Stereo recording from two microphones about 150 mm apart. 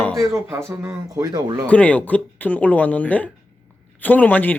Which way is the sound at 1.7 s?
10° left (ahead or behind).